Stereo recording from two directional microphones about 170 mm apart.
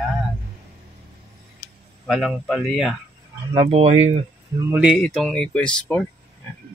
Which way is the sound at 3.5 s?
35° right (ahead or behind).